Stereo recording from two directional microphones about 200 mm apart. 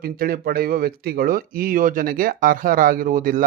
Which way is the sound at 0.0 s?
45° right (ahead or behind).